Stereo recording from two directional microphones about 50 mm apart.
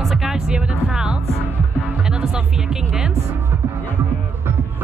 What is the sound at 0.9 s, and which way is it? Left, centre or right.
Speech, right.